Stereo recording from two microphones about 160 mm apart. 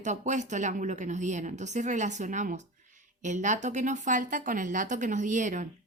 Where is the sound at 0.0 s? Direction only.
50° right (ahead or behind).